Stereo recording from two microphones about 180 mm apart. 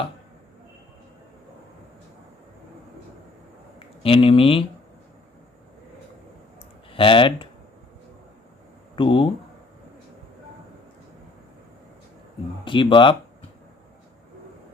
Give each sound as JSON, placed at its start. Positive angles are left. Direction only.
{"t": 3.8, "sound": "speech", "side_deg": 30}
{"t": 6.9, "sound": "speech", "side_deg": 30}
{"t": 9.0, "sound": "speech", "side_deg": 30}
{"t": 12.6, "sound": "speech", "side_deg": 25}